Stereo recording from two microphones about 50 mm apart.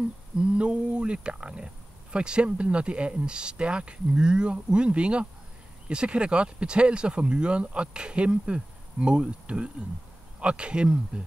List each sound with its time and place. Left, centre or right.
0.4 s speech: right